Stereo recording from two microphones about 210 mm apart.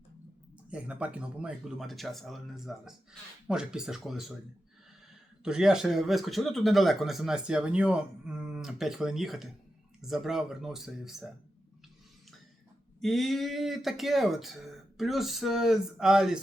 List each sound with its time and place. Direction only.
0.7 s speech: 5° right (ahead or behind)
5.4 s speech: 5° right (ahead or behind)
13.0 s speech: centre (ahead or behind)